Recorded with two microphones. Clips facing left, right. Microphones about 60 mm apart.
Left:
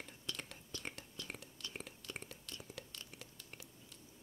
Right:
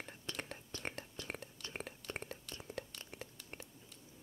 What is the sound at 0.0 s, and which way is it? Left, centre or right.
Whispering, right.